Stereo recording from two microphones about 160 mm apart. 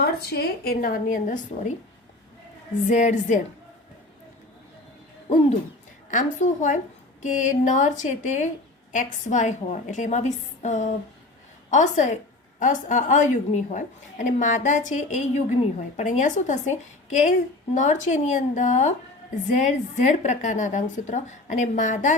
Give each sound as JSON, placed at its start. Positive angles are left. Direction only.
{"t": 0.0, "sound": "a woman's voice", "side_deg": 75}
{"t": 2.8, "sound": "a woman's voice", "side_deg": 45}
{"t": 5.3, "sound": "a sound", "side_deg": 40}
{"t": 6.1, "sound": "a woman's voice", "side_deg": 50}